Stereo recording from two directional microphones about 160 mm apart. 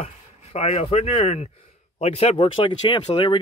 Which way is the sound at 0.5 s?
40° left (ahead or behind).